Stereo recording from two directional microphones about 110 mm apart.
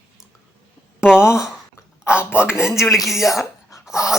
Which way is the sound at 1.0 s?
5° right (ahead or behind).